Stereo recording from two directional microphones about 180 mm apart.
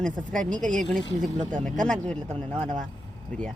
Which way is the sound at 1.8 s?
5° left (ahead or behind).